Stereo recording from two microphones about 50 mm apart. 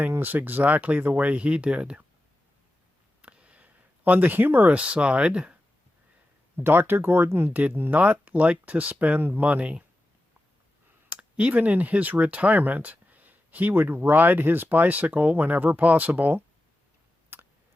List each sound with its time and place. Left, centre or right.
0.1 s speech: right
3.2 s a sound: right
4.0 s speech: right
4.7 s speech: right
6.6 s speech: right
7.3 s speech: right
7.5 s speech: right
11.1 s a sound: right
11.5 s speech: right
17.3 s a sound: right